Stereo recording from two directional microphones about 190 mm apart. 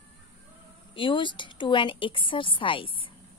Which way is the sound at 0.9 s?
25° left (ahead or behind).